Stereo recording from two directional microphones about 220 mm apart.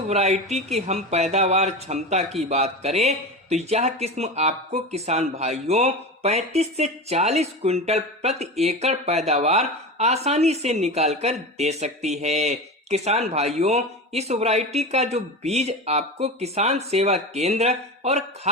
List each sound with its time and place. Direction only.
0.1 s a man's voice: 30° right (ahead or behind)